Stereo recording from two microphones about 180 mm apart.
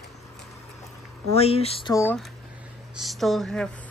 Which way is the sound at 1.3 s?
35° left (ahead or behind).